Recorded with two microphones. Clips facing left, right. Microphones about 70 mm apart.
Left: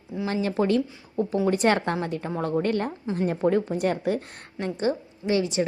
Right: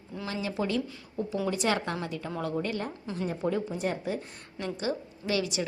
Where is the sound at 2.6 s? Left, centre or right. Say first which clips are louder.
Left 7 dB; left.